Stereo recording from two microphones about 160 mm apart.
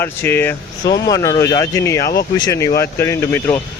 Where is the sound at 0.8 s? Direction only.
25° left (ahead or behind).